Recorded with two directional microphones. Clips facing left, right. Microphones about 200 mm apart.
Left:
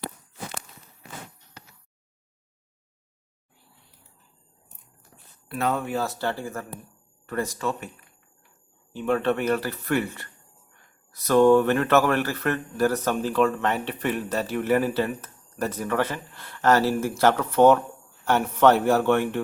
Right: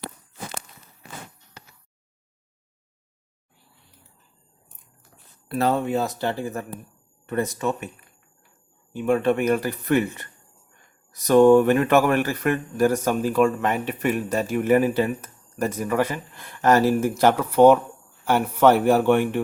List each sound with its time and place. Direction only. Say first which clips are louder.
5.5 s speech: right 4 dB; 35° right (ahead or behind); by 7.9 s 20° right (ahead or behind)
8.9 s speech: right 3 dB; 10° right (ahead or behind)